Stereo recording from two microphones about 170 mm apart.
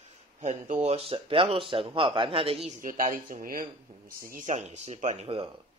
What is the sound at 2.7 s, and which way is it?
A man's voice, 55° right (ahead or behind).